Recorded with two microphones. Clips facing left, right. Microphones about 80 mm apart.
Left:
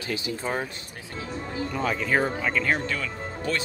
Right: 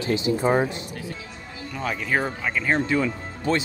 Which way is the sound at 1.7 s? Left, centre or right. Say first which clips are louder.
Even; centre.